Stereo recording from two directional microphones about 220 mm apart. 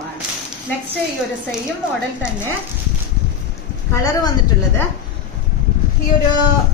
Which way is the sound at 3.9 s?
15° left (ahead or behind).